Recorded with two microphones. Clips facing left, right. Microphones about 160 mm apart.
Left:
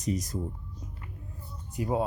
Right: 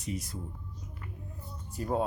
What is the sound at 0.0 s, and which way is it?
Speech, 40° left (ahead or behind).